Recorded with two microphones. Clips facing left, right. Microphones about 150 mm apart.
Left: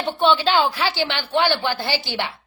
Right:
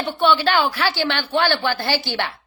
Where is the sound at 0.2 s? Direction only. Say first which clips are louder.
Even; 20° left (ahead or behind).